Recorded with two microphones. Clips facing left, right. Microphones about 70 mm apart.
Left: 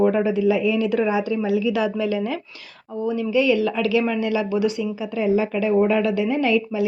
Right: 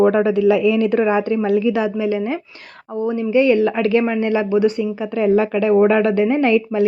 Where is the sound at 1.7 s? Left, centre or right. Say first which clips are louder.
Right 3 dB; right.